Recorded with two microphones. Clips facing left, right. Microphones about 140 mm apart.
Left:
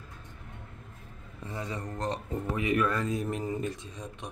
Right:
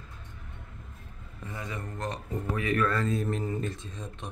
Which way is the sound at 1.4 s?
30° left (ahead or behind).